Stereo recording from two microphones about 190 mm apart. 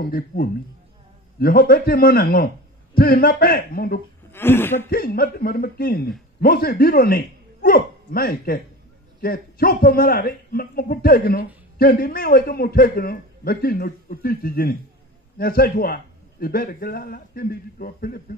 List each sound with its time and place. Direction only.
0.0 s a man's voice: 50° left (ahead or behind)
4.3 s speech: 10° left (ahead or behind)
4.8 s a man's voice: 50° left (ahead or behind)